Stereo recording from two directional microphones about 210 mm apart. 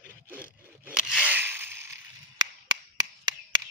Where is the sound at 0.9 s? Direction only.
5° right (ahead or behind).